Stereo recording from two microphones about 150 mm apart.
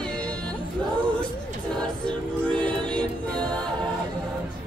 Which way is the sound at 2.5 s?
5° left (ahead or behind).